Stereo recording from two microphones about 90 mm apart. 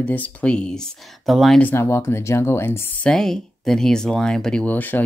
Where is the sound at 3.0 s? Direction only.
5° left (ahead or behind).